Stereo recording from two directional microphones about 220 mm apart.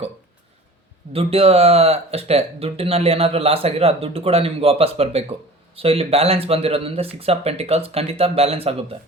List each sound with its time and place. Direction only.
1.1 s speech: 25° right (ahead or behind)